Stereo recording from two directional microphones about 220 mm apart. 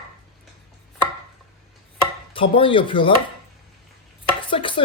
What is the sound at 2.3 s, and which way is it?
Speech, 25° left (ahead or behind).